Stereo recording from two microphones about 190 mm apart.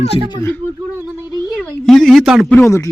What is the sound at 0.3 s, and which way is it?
Speech, 10° left (ahead or behind).